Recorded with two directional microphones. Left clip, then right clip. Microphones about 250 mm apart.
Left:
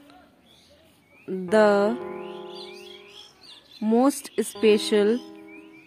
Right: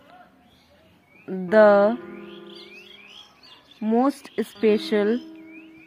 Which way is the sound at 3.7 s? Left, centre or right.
Left.